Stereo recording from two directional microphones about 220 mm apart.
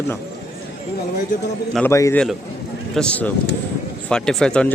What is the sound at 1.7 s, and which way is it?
A man's voice, 10° left (ahead or behind).